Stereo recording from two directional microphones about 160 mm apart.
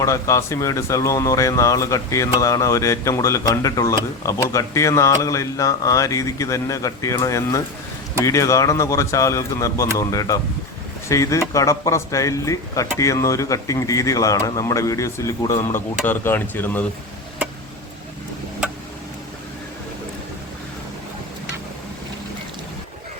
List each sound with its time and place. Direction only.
0.0 s speech: 20° left (ahead or behind)